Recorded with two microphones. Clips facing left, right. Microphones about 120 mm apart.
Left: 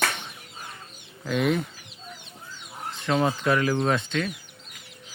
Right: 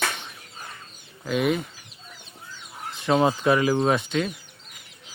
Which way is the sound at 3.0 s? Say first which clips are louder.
Right 3 dB; 20° right (ahead or behind).